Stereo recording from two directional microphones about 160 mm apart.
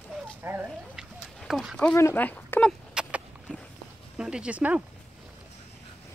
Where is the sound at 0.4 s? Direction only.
15° right (ahead or behind).